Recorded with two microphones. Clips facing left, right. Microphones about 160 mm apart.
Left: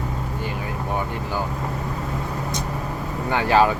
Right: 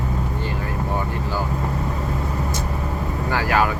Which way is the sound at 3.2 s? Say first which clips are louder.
Left 3 dB; 25° left (ahead or behind).